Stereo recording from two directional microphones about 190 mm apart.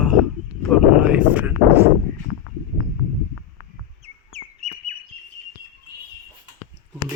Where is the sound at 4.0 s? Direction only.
35° right (ahead or behind).